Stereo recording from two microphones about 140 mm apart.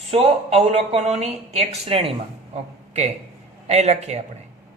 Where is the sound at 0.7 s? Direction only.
45° right (ahead or behind).